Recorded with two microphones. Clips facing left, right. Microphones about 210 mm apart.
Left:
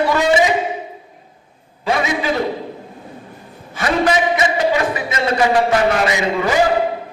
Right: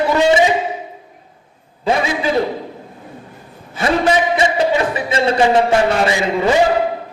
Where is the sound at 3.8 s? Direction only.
25° right (ahead or behind).